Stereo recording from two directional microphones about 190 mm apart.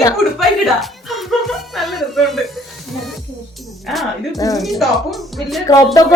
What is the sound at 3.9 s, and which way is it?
Speech, centre (ahead or behind).